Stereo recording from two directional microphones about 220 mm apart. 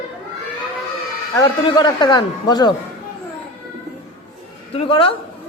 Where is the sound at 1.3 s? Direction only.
15° left (ahead or behind).